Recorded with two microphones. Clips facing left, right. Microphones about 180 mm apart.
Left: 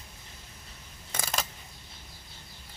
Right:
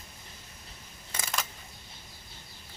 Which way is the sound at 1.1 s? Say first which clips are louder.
Left 2 dB; 40° left (ahead or behind).